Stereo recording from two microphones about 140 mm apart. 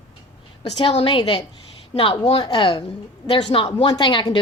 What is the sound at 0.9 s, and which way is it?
Speech, 45° left (ahead or behind).